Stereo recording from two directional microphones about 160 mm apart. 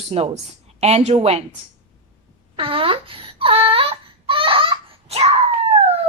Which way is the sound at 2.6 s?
35° right (ahead or behind).